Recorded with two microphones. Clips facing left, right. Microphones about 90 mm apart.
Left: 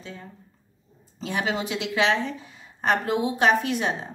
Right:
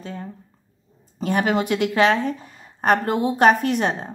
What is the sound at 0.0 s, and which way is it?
A woman's voice, 45° right (ahead or behind).